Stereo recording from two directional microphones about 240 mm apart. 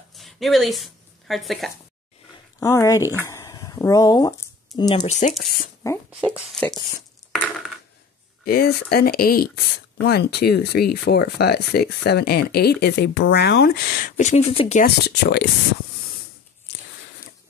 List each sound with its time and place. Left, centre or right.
0.1 s a sound: centre
2.6 s speech: centre
3.2 s a sound: centre
4.7 s speech: centre
5.9 s speech: centre
8.5 s speech: left
15.0 s speech: left